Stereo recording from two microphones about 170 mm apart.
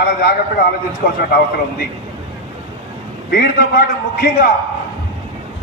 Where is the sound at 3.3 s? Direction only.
60° left (ahead or behind).